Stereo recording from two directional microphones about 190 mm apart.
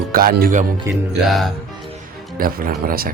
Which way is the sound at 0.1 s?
50° right (ahead or behind).